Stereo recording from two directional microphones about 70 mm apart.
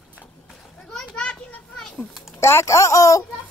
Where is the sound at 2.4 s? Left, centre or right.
Left.